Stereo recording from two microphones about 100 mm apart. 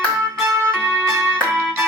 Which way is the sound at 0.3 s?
25° right (ahead or behind).